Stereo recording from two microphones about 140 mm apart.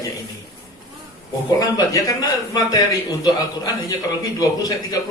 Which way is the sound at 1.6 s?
25° left (ahead or behind).